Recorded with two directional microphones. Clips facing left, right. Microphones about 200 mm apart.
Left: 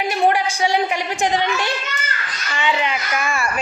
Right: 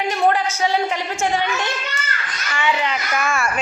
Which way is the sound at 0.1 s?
10° left (ahead or behind).